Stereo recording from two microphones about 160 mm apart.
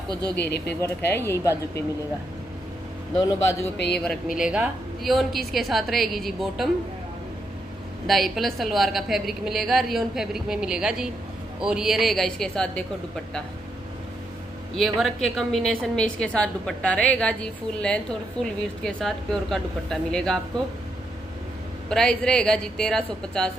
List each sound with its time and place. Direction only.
0.7 s speech: 15° left (ahead or behind)
3.2 s speech: 20° left (ahead or behind)
3.7 s speech: 90° left
4.4 s a woman's voice: 5° right (ahead or behind)
8.1 s a woman's voice: centre (ahead or behind)
14.8 s a woman's voice: centre (ahead or behind)
21.8 s a woman's voice: 5° left (ahead or behind)